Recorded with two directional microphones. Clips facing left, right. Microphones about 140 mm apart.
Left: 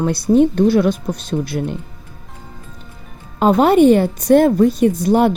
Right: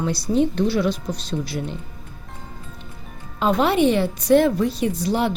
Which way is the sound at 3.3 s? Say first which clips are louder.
Left 7 dB; 45° left (ahead or behind).